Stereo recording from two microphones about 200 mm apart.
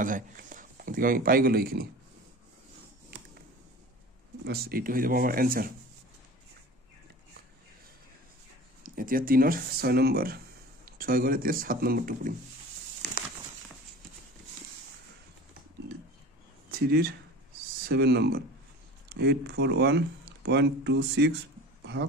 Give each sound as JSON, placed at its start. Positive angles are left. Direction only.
{"t": 0.0, "sound": "speech", "side_deg": -40}
{"t": 4.5, "sound": "speech", "side_deg": -50}
{"t": 8.8, "sound": "speech", "side_deg": -45}
{"t": 16.7, "sound": "speech", "side_deg": -50}